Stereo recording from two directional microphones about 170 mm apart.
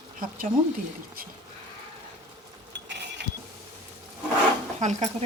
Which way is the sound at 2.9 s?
90° right.